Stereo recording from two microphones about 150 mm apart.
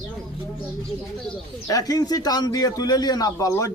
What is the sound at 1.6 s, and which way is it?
A man's voice, 25° left (ahead or behind).